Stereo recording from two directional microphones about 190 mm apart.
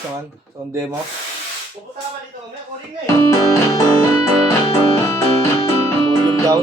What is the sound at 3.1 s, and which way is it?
Music, 15° left (ahead or behind).